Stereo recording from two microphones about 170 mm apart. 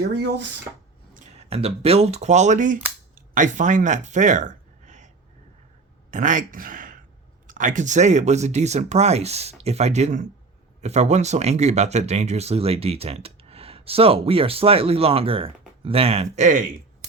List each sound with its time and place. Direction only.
0.0 s speech: 90° right
1.1 s speech: 40° right (ahead or behind)
6.1 s speech: 50° right (ahead or behind)